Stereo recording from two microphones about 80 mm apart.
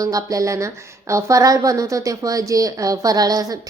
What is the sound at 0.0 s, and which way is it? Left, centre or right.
Speech, right.